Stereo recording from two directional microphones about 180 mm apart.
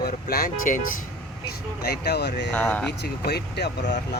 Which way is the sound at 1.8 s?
65° left (ahead or behind).